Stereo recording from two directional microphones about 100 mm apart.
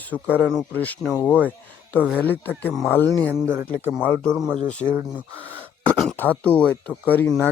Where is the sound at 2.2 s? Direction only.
20° left (ahead or behind).